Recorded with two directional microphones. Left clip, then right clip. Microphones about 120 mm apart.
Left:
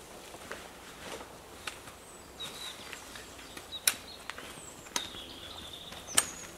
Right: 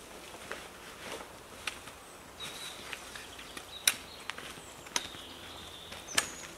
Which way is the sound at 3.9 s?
10° left (ahead or behind).